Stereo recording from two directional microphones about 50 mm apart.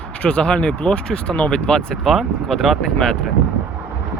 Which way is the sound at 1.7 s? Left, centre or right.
Centre.